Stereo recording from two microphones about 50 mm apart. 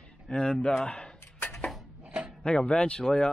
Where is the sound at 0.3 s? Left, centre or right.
Centre.